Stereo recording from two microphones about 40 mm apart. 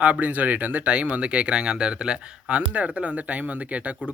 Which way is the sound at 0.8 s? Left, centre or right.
Right.